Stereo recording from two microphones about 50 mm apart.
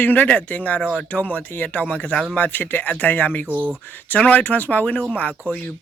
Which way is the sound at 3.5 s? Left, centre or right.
Right.